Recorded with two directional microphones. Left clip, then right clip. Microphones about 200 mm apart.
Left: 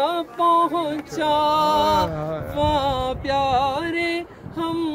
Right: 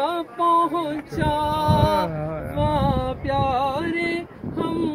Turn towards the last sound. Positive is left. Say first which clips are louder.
# even
turn(degrees=-35)  # may be behind; listen again after turning